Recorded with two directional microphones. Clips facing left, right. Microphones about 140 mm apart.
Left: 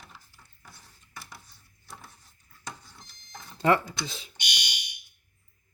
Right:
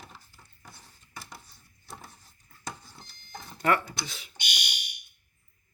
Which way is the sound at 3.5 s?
25° left (ahead or behind).